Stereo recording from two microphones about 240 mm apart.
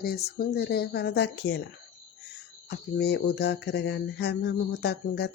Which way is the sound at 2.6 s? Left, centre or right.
Left.